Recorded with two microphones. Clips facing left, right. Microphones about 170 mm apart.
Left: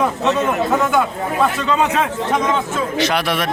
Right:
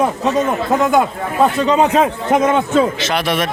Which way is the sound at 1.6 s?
35° right (ahead or behind).